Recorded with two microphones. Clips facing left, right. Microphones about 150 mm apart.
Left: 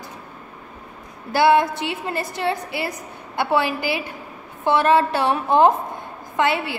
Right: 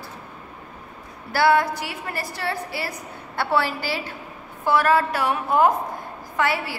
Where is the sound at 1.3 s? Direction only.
20° left (ahead or behind).